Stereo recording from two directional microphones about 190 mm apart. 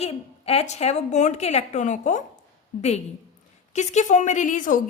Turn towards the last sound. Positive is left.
turn(degrees=40)  # may be behind; listen again after turning